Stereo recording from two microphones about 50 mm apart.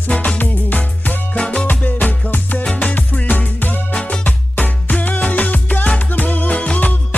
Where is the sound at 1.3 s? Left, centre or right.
Centre.